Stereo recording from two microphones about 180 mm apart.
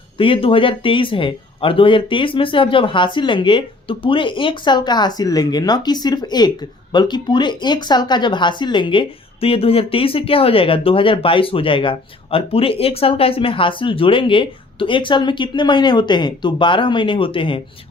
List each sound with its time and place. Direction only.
0.2 s speech: 30° left (ahead or behind)